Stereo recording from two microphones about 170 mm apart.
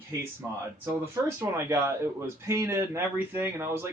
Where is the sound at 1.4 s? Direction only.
15° right (ahead or behind).